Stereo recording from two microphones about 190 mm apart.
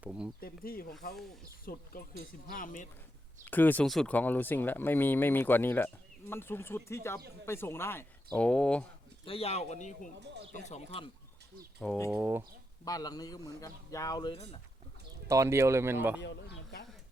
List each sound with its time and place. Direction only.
0.0 s speech: 5° right (ahead or behind)
0.3 s speech: 50° left (ahead or behind)
3.4 s speech: 10° left (ahead or behind)
9.2 s speech: 30° left (ahead or behind)
12.1 s speech: 10° right (ahead or behind)
12.8 s a man's voice: 20° left (ahead or behind)
14.3 s speech: 35° left (ahead or behind)
15.3 s speech: 15° right (ahead or behind)
16.2 s speech: 65° left (ahead or behind)